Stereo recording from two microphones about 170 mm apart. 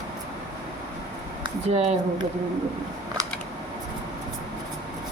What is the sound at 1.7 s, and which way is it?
Speech, 35° right (ahead or behind).